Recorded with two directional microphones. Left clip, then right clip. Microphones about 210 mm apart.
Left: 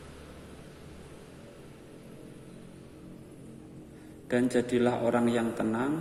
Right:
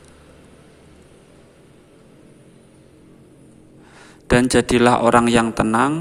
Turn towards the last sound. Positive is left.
turn(degrees=-35)  # may be behind; listen again after turning